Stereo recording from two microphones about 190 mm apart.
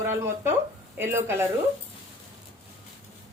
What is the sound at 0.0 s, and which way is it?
Speech, 10° right (ahead or behind).